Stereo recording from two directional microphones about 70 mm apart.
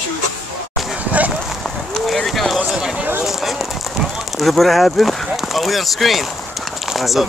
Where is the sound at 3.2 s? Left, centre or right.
Centre.